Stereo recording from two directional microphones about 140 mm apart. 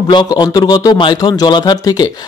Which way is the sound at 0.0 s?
30° left (ahead or behind).